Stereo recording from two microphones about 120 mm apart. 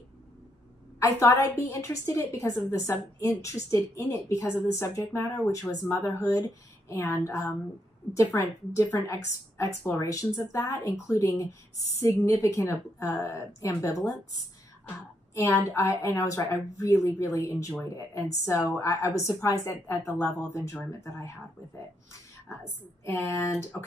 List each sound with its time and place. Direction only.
0.9 s a woman's voice: 30° left (ahead or behind)
15.3 s a woman's voice: 25° left (ahead or behind)